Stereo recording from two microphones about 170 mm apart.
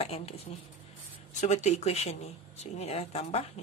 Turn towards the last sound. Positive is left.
turn(degrees=40)  # may be behind; listen again after turning